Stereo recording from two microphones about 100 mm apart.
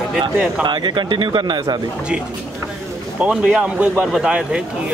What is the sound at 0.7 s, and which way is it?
Speech, 50° right (ahead or behind).